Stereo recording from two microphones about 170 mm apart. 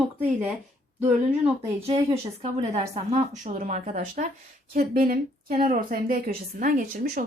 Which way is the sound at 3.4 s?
50° right (ahead or behind).